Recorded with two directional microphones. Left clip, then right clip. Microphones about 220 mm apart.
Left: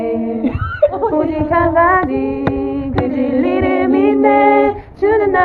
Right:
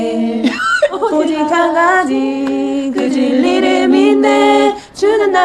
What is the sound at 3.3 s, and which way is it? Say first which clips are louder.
Music: right 2 dB; 45° right (ahead or behind).